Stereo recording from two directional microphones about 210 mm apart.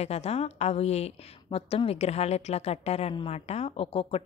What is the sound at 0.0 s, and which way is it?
A woman's voice, 30° left (ahead or behind).